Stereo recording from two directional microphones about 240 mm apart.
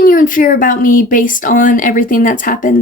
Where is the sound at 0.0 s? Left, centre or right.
Left.